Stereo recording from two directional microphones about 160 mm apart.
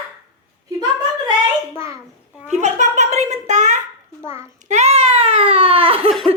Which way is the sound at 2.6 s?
45° right (ahead or behind).